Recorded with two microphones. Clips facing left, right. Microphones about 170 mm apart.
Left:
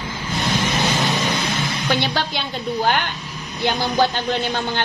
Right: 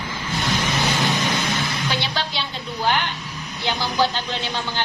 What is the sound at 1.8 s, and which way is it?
Speech, 50° left (ahead or behind).